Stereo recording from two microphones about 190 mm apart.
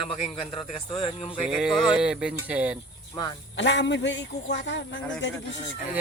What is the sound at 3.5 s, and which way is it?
Speech, 70° left (ahead or behind).